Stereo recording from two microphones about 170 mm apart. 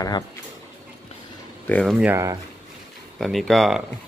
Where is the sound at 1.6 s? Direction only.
10° left (ahead or behind).